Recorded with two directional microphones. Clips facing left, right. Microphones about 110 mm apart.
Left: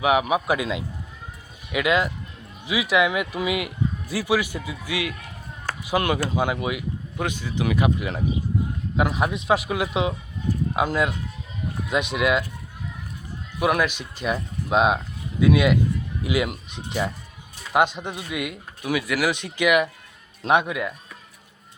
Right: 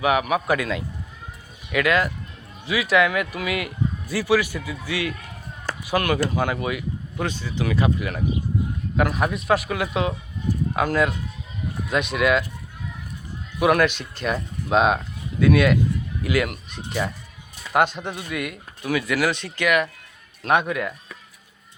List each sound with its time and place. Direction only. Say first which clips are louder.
0.0 s speech: even; 15° left (ahead or behind)
13.6 s speech: right 3 dB; 10° left (ahead or behind)